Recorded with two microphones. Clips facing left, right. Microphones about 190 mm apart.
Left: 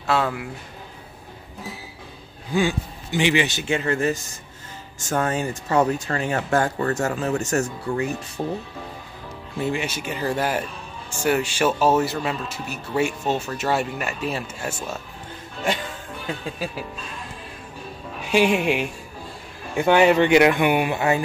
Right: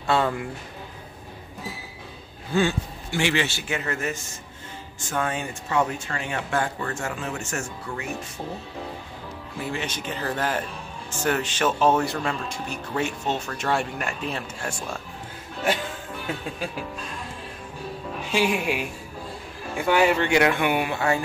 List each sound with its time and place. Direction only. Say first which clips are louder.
0.0 s speech: even; centre (ahead or behind)
2.5 s speech: left 1 dB; 15° left (ahead or behind); by 8.1 s 35° left (ahead or behind)
9.8 s speech: left 3 dB; 10° left (ahead or behind)
18.3 s speech: left 5 dB; 20° left (ahead or behind)
19.9 s speech: left 5 dB; 20° left (ahead or behind)